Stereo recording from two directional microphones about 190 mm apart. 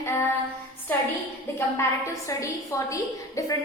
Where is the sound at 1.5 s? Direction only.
15° left (ahead or behind).